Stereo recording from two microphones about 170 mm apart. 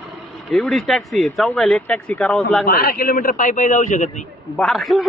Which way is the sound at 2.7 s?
65° left (ahead or behind).